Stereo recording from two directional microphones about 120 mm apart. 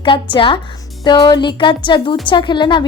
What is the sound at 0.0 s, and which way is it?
A woman's voice, 45° left (ahead or behind).